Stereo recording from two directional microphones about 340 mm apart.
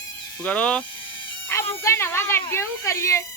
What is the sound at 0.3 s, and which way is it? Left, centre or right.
Speech, centre.